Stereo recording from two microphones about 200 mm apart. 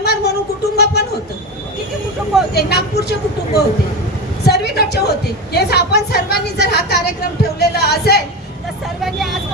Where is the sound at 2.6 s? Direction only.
55° left (ahead or behind).